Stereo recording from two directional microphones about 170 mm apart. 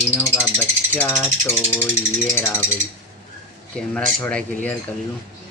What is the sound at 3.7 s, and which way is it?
Speech, 5° left (ahead or behind).